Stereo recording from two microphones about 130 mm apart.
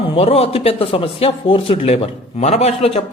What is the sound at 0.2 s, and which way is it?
A man's voice, 50° left (ahead or behind).